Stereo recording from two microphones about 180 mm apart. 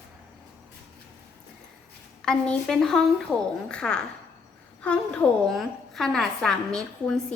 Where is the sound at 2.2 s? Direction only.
5° left (ahead or behind).